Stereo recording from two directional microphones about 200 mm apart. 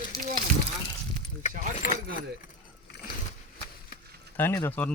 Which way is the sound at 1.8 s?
45° left (ahead or behind).